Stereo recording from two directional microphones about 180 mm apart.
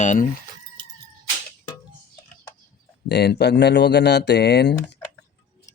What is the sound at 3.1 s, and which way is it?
Speech, 65° left (ahead or behind).